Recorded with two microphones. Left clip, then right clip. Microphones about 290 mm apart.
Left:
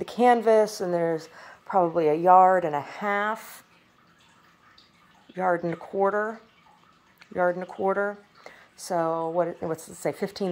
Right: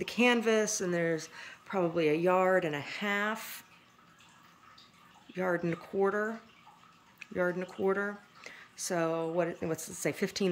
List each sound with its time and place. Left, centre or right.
0.4 s speech: centre
5.3 s speech: centre
7.3 s speech: centre
9.4 s speech: centre